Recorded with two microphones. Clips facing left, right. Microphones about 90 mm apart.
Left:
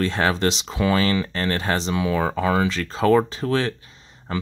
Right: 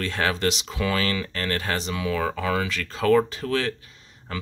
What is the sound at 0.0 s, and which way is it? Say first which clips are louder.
Speech: left 4 dB; 30° left (ahead or behind).